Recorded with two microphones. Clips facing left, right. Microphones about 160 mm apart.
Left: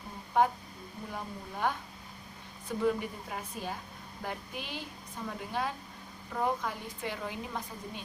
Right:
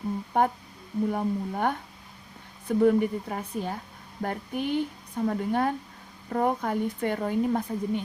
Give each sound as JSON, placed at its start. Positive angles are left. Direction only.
{"t": 0.4, "sound": "a woman's voice", "side_deg": -55}